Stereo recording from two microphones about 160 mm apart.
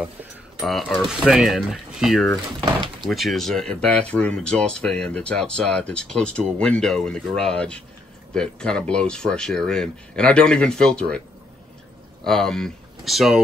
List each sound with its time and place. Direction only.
0.7 s speech: centre (ahead or behind)
2.6 s speech: 30° right (ahead or behind)
3.1 s speech: centre (ahead or behind)
12.3 s speech: 5° left (ahead or behind)